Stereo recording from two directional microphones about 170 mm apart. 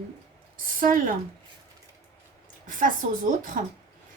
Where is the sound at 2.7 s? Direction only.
50° right (ahead or behind).